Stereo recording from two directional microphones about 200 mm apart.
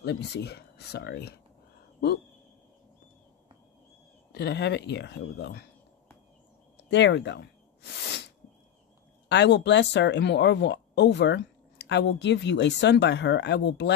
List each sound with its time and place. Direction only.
0.0 s speech: 55° left (ahead or behind)
4.3 s speech: 55° left (ahead or behind)
6.9 s a sound: 60° left (ahead or behind)
9.3 s speech: 60° left (ahead or behind)